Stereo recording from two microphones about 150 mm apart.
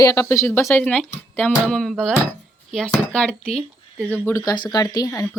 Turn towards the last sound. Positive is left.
turn(degrees=20)  # may be behind; listen again after turning